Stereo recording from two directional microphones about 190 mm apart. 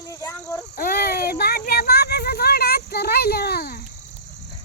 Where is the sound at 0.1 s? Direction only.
15° left (ahead or behind).